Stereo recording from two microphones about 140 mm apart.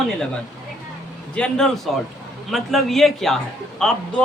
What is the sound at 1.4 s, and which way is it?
Speech, 5° left (ahead or behind).